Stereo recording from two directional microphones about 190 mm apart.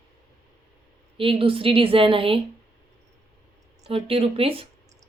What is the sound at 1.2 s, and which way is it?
A woman's voice, 30° right (ahead or behind).